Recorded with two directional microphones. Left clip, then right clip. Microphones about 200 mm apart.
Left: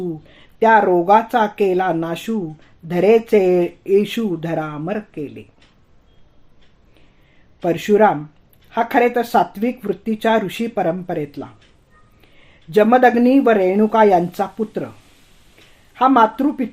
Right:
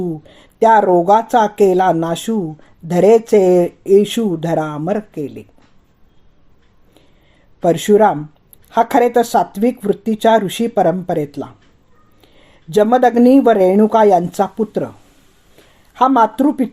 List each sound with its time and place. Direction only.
0.3 s speech: 35° right (ahead or behind)
7.6 s speech: 35° right (ahead or behind)
12.7 s speech: 35° right (ahead or behind)
16.0 s speech: 35° right (ahead or behind)